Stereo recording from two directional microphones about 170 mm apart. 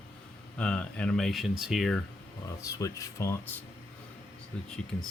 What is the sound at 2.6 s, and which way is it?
Speech, 20° left (ahead or behind).